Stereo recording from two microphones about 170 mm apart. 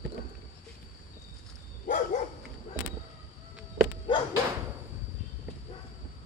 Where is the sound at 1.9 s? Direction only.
50° left (ahead or behind).